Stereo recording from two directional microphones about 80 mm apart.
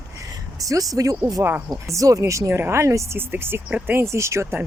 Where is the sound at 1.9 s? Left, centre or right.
Right.